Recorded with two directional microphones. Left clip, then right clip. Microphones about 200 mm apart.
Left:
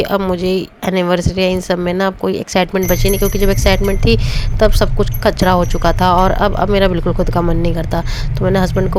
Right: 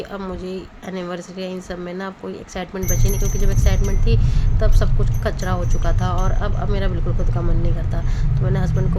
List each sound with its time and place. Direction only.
0.0 s speech: 50° left (ahead or behind)